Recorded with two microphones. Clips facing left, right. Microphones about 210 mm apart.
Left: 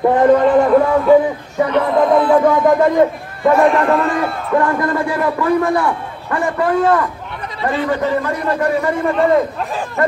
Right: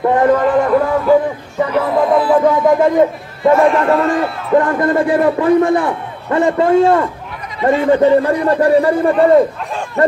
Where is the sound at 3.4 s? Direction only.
Centre (ahead or behind).